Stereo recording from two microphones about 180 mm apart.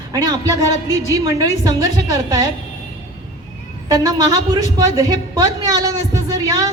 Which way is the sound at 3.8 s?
20° right (ahead or behind).